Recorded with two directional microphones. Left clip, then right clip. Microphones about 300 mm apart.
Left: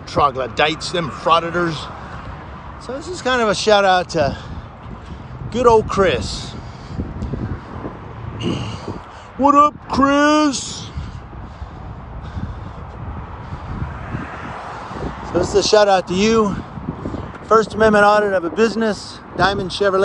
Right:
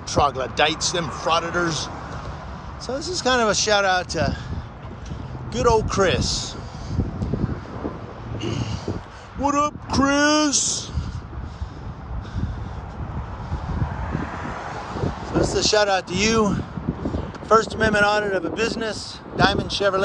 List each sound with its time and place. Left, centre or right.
0.1 s a man's voice: centre
2.9 s speech: centre
5.5 s a man's voice: centre
8.4 s a sound: centre
9.4 s speech: centre
14.2 s vehicle: right
15.3 s speech: centre
17.5 s speech: centre